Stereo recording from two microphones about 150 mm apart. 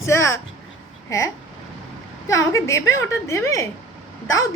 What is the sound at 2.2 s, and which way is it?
A woman's voice, 20° left (ahead or behind).